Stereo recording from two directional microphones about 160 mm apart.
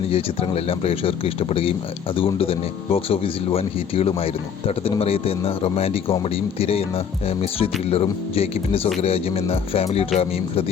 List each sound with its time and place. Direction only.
0.1 s speech: 35° left (ahead or behind)